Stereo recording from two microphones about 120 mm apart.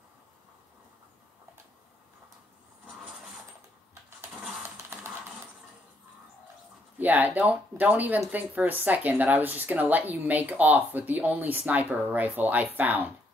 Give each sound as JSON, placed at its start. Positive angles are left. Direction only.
{"t": 4.6, "sound": "music", "side_deg": -20}
{"t": 7.0, "sound": "speech", "side_deg": -15}